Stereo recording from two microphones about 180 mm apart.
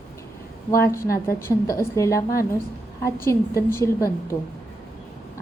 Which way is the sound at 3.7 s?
15° left (ahead or behind).